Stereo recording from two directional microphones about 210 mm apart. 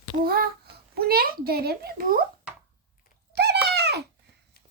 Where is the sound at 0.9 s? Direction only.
45° right (ahead or behind).